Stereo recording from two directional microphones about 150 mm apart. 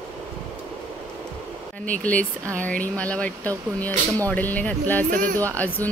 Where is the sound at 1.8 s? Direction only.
10° left (ahead or behind).